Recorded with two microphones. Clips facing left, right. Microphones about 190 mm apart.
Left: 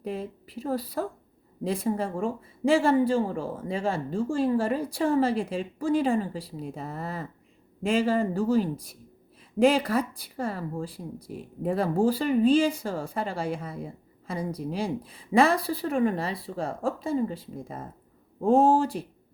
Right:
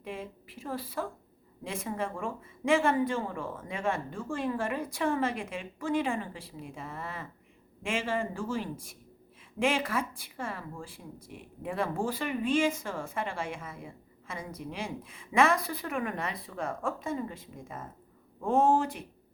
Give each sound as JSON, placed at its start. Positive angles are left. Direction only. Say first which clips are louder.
{"t": 0.0, "sound": "speech", "louder": "left 6 dB", "side_deg": 40}